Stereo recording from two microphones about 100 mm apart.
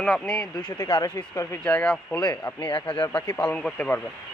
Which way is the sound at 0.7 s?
45° left (ahead or behind).